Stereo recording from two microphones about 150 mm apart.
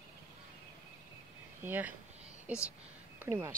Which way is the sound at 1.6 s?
10° right (ahead or behind).